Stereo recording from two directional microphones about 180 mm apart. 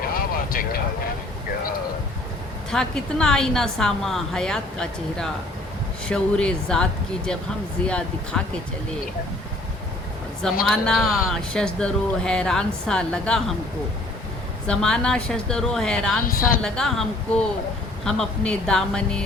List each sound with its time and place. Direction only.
0.1 s vehicle: 55° left (ahead or behind)
2.6 s speech: 5° left (ahead or behind)
7.9 s speech: 5° left (ahead or behind)
10.6 s speech: centre (ahead or behind)
14.7 s speech: 5° left (ahead or behind)
16.2 s a woman's voice: 50° left (ahead or behind)
16.6 s speech: centre (ahead or behind)